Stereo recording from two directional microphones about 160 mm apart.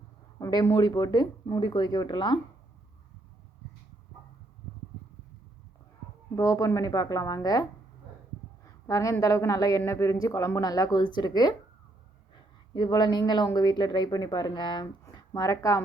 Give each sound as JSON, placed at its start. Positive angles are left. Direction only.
{"t": 0.3, "sound": "speech", "side_deg": 20}
{"t": 6.3, "sound": "speech", "side_deg": 20}
{"t": 8.6, "sound": "a sound", "side_deg": 20}
{"t": 9.2, "sound": "speech", "side_deg": 20}
{"t": 12.7, "sound": "speech", "side_deg": 25}